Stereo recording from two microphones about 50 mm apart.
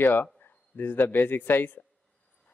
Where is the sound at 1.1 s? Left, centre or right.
Left.